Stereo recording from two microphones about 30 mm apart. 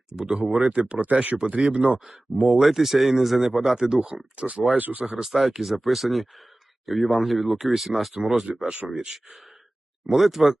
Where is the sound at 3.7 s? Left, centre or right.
Centre.